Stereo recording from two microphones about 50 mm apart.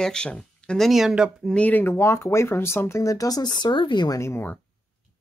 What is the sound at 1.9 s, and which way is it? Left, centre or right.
Speech, left.